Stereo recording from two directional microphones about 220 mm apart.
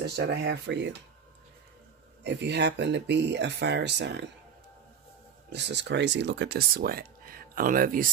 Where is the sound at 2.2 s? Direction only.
50° right (ahead or behind).